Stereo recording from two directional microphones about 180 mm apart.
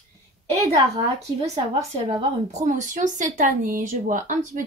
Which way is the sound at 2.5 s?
40° right (ahead or behind).